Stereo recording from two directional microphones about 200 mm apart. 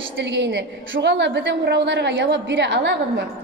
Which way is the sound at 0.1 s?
60° right (ahead or behind).